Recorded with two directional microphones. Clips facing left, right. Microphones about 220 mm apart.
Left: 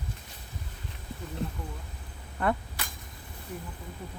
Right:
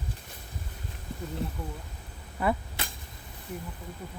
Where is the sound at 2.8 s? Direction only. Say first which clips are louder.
Right 2 dB; 25° right (ahead or behind).